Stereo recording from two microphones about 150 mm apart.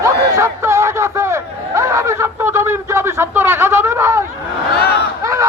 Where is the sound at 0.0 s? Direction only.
20° right (ahead or behind).